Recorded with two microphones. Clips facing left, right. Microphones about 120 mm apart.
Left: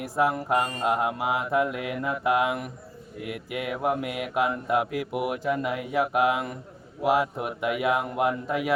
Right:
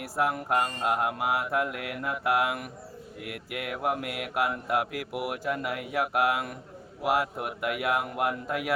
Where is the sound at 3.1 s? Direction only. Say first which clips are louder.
Left 5 dB; centre (ahead or behind).